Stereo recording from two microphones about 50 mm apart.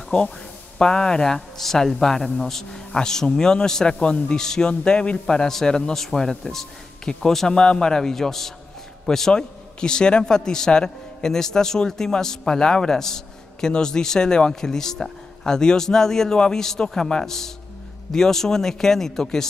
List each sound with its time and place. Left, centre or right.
0.7 s a man's voice: centre